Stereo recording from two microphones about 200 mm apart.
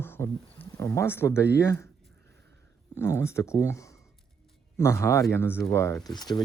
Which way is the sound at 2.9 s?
15° left (ahead or behind).